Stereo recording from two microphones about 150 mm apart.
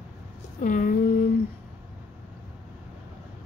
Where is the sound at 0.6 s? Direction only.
60° left (ahead or behind).